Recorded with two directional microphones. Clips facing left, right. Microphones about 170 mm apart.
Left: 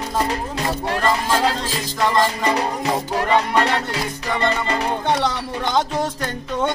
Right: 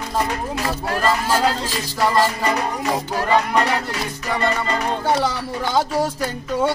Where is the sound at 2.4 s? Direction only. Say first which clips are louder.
Left 1 dB; 25° left (ahead or behind).